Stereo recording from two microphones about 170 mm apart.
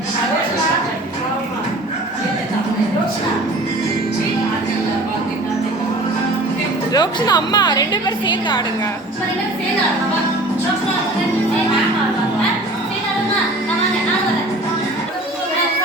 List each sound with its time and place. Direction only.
6.9 s a woman's voice: 25° left (ahead or behind)